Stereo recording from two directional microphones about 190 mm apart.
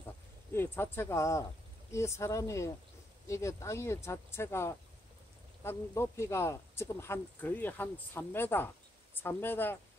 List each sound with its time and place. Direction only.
0.5 s speech: 10° left (ahead or behind)